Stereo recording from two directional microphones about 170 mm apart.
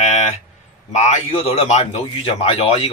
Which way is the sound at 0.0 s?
45° left (ahead or behind).